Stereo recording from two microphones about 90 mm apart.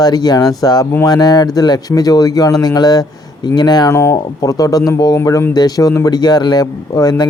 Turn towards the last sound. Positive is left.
turn(degrees=45)  # may be behind; listen again after turning